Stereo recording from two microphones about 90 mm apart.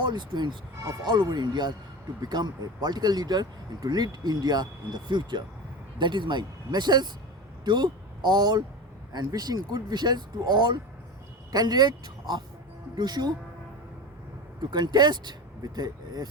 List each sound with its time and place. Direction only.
0.0 s speech: 55° right (ahead or behind)
14.7 s speech: 55° right (ahead or behind)